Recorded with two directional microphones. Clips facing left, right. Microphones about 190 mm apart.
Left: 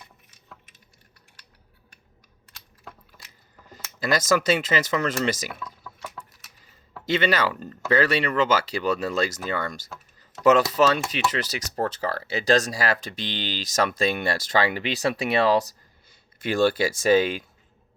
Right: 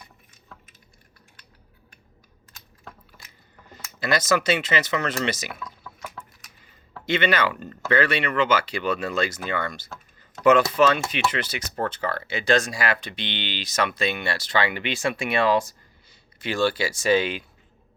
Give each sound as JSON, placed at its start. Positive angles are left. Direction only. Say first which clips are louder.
{"t": 4.0, "sound": "speech", "louder": "left 1 dB", "side_deg": 45}
{"t": 7.0, "sound": "speech", "louder": "even", "side_deg": 40}
{"t": 16.4, "sound": "speech", "louder": "left 2 dB", "side_deg": 50}